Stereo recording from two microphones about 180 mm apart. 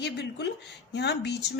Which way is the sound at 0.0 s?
70° left (ahead or behind).